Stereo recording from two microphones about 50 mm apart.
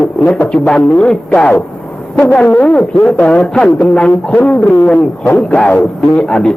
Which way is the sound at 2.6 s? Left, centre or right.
Left.